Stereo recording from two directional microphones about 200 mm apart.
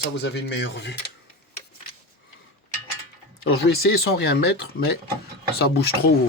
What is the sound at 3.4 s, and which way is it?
Speech, 50° left (ahead or behind).